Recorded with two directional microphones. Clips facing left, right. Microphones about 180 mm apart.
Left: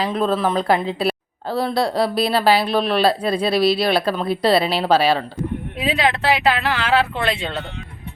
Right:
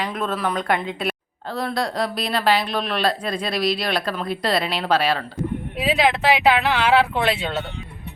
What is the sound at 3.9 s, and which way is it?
A woman's voice, 30° left (ahead or behind).